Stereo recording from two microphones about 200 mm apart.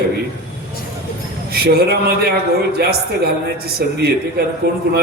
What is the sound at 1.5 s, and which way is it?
Speech, 50° right (ahead or behind).